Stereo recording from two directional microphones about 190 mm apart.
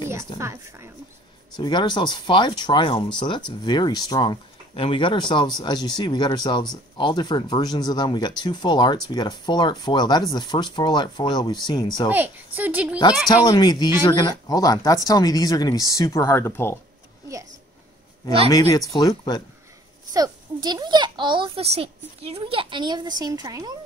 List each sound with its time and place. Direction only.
0.4 s speech: 15° right (ahead or behind)
1.6 s speech: 25° left (ahead or behind)
12.1 s speech: 10° right (ahead or behind)
13.3 s speech: 20° left (ahead or behind)
18.5 s speech: 15° left (ahead or behind)
20.1 s a child's voice: 20° right (ahead or behind)